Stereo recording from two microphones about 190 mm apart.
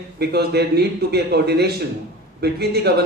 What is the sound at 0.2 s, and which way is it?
A man's voice, 60° right (ahead or behind).